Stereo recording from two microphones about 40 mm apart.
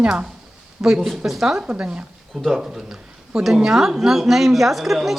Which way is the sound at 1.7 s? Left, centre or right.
Right.